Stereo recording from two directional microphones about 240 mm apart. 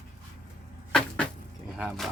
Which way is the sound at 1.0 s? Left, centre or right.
Centre.